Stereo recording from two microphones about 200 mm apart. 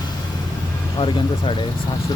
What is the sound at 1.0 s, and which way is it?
Speech, 25° left (ahead or behind).